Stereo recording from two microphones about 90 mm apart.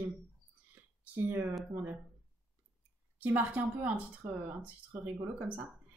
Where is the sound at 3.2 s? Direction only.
20° right (ahead or behind).